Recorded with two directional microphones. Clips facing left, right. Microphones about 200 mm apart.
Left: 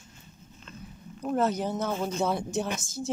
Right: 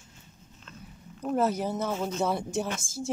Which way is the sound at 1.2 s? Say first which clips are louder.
Even; 5° right (ahead or behind).